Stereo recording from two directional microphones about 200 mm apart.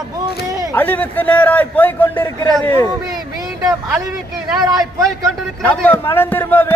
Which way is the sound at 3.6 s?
15° right (ahead or behind).